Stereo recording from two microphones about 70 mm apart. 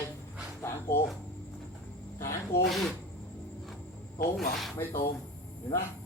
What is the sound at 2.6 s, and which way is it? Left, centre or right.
Speech, centre.